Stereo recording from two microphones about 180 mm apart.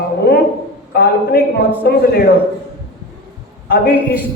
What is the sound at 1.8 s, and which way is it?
Speech, 60° left (ahead or behind).